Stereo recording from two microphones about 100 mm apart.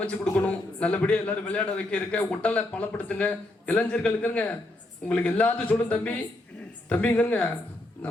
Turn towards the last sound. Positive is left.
turn(degrees=15)  # may be behind; listen again after turning